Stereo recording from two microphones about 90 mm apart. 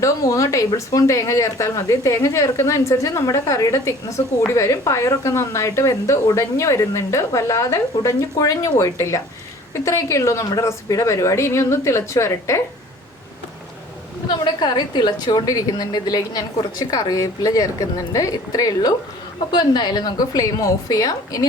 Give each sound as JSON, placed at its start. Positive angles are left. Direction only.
{"t": 0.0, "sound": "speech", "side_deg": 40}
{"t": 14.4, "sound": "a woman's voice", "side_deg": 55}